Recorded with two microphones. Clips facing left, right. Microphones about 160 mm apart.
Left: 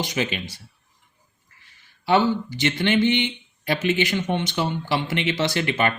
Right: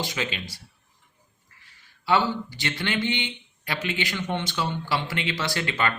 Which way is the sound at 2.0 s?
20° left (ahead or behind).